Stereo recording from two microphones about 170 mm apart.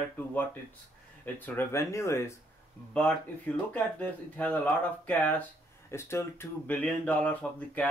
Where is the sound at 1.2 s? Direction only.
10° left (ahead or behind).